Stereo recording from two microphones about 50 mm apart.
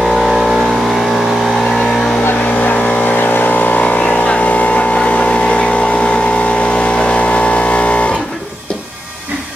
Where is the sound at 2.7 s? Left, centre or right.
Left.